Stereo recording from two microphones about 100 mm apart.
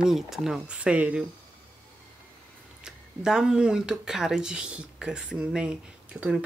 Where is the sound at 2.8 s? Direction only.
5° right (ahead or behind).